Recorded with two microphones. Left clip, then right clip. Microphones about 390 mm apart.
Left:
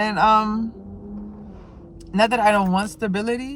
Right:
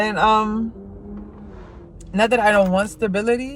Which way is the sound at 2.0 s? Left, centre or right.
Centre.